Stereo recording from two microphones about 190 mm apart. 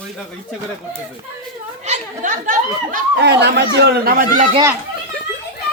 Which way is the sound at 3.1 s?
65° right (ahead or behind).